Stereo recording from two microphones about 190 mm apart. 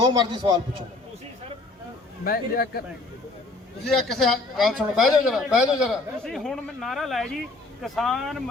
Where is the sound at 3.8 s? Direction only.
Centre (ahead or behind).